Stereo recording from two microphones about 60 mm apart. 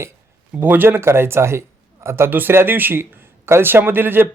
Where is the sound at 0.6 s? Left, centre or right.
Right.